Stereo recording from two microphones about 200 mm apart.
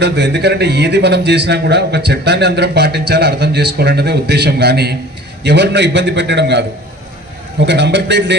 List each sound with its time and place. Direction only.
0.0 s a man's voice: 55° right (ahead or behind)